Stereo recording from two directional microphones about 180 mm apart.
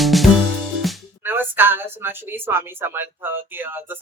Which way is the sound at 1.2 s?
10° right (ahead or behind).